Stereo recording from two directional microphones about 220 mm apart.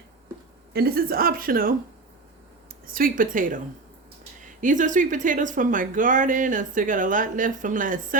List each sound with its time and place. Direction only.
0.7 s speech: 45° right (ahead or behind)
2.8 s speech: 40° right (ahead or behind)
4.6 s speech: 35° right (ahead or behind)